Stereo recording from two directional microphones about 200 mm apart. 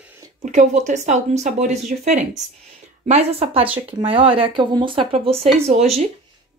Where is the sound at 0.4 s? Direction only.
35° right (ahead or behind).